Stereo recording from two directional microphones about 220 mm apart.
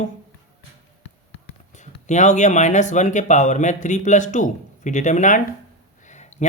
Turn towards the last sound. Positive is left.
turn(degrees=35)  # may be behind; listen again after turning